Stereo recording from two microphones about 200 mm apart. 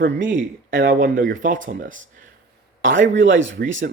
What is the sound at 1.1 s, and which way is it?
Speech, 40° right (ahead or behind).